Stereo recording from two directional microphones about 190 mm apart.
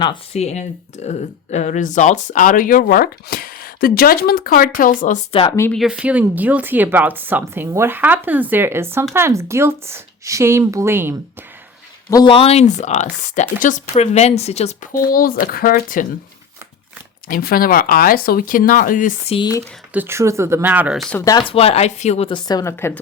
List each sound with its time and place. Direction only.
0.3 s speech: 35° left (ahead or behind)
5.3 s speech: 30° left (ahead or behind)
5.7 s speech: 5° right (ahead or behind)
12.1 s speech: 25° left (ahead or behind); by 16.0 s 45° left (ahead or behind)
17.2 s speech: 50° left (ahead or behind)
19.4 s speech: 20° left (ahead or behind)
19.9 s speech: 10° right (ahead or behind)
21.1 s speech: 15° left (ahead or behind)